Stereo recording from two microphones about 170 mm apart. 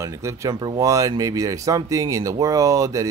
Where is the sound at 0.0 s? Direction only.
15° right (ahead or behind).